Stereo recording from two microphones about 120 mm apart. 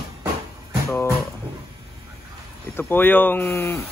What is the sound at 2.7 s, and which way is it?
Speech, 15° left (ahead or behind).